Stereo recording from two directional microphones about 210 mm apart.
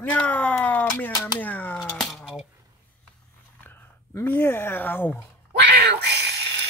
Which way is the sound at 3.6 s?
10° left (ahead or behind).